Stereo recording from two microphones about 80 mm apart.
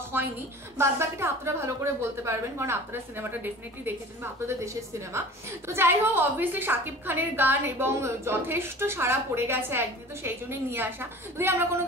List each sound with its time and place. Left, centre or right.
0.1 s a sound: right
0.7 s a woman's voice: right
5.7 s a woman's voice: right